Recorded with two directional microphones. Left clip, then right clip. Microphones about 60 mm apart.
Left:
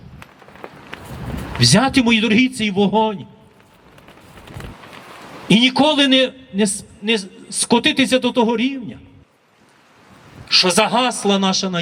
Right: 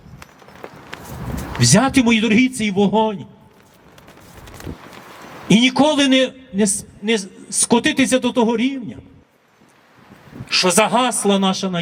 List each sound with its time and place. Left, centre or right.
0.2 s run: right
0.9 s a sound: right
1.5 s a man's voice: centre
4.4 s vehicle: right
5.5 s a man's voice: centre
10.5 s speech: centre